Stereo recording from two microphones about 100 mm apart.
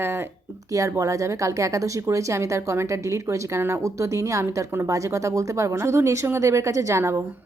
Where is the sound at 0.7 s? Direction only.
30° right (ahead or behind).